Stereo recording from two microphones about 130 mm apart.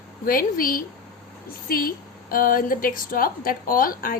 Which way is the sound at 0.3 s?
90° left.